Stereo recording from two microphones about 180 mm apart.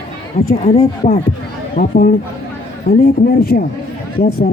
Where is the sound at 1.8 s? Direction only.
50° left (ahead or behind).